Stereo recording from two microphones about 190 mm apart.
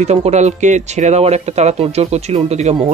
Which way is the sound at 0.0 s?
35° right (ahead or behind).